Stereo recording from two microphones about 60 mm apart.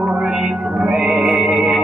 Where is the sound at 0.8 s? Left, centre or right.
Centre.